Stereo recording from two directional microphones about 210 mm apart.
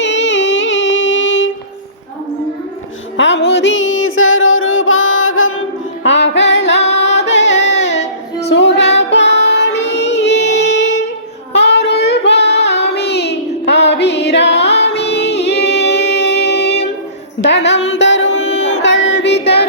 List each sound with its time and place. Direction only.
0.0 s music: 55° left (ahead or behind)
3.2 s a sound: 55° left (ahead or behind)
6.9 s singing: 60° left (ahead or behind)
7.3 s music: 55° left (ahead or behind)
8.4 s female singing: 55° left (ahead or behind)
9.0 s music: 55° left (ahead or behind)
11.5 s child singing: 55° left (ahead or behind)
14.8 s music: 55° left (ahead or behind)